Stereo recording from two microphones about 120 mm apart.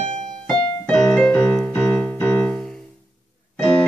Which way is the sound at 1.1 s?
10° left (ahead or behind).